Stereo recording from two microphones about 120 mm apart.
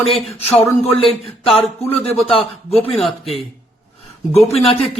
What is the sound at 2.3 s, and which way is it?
Speech, 55° left (ahead or behind).